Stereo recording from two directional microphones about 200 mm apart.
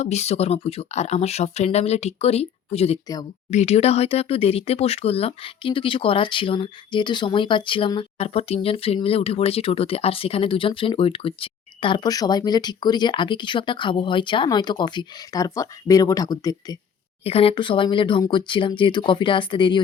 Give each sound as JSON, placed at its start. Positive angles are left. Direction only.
{"t": 0.0, "sound": "speech", "side_deg": 35}